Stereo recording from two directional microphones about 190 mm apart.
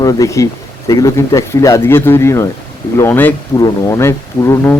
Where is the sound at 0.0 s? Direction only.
15° left (ahead or behind).